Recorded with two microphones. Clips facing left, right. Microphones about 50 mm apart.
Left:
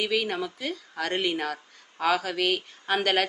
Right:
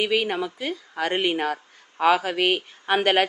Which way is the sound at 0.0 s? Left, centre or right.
Right.